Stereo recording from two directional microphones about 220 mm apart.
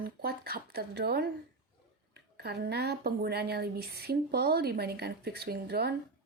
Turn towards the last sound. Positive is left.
turn(degrees=-45)  # may be behind; listen again after turning